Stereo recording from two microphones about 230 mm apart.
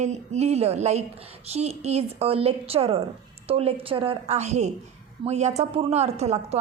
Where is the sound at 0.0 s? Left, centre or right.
Right.